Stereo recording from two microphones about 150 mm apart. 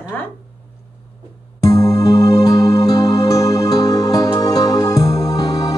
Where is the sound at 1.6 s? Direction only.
25° left (ahead or behind).